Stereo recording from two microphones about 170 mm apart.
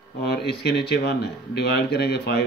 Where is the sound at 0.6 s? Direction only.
75° left (ahead or behind).